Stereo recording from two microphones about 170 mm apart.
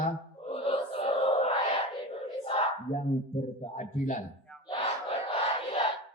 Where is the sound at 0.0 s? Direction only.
35° left (ahead or behind).